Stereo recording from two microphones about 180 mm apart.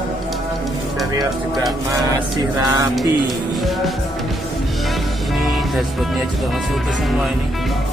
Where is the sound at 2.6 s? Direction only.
20° right (ahead or behind).